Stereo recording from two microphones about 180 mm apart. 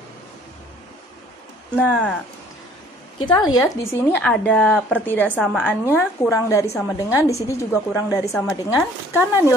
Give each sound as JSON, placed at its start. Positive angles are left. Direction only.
{"t": 1.8, "sound": "speech", "side_deg": 5}
{"t": 3.3, "sound": "speech", "side_deg": 25}
{"t": 5.4, "sound": "speech", "side_deg": 0}
{"t": 5.7, "sound": "speech", "side_deg": 10}